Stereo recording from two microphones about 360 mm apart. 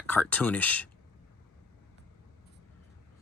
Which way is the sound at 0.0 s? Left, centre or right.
Centre.